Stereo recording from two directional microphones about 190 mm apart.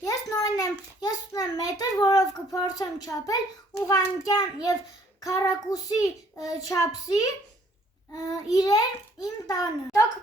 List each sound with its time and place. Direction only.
0.0 s a sound: 20° left (ahead or behind)
3.8 s a child's voice: 20° left (ahead or behind)
8.5 s a child's voice: 20° left (ahead or behind)